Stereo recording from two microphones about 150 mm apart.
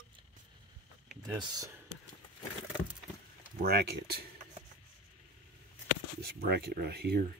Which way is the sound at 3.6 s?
90° right.